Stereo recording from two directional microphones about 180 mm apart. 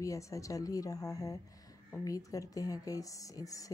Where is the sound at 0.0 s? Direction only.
15° left (ahead or behind).